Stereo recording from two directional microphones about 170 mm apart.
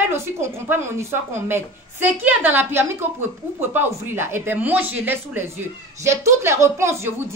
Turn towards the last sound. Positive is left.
turn(degrees=-15)  # may be behind; listen again after turning